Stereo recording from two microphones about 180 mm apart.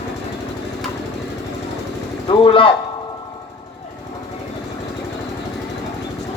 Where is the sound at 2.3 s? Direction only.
30° left (ahead or behind).